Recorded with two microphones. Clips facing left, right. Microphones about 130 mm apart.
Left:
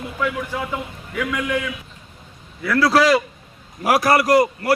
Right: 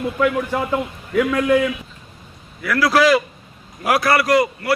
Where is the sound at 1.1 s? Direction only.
45° right (ahead or behind).